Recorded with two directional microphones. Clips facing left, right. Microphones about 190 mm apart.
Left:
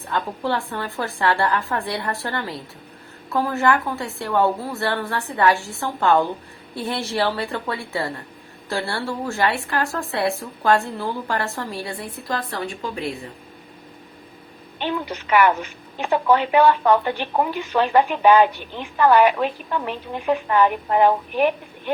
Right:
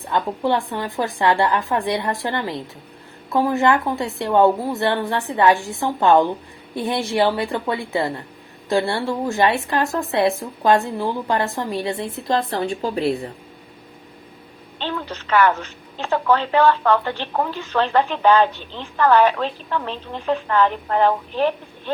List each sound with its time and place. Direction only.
0.0 s a woman's voice: 15° right (ahead or behind); by 13.1 s 35° right (ahead or behind)
14.8 s a woman's voice: 15° left (ahead or behind)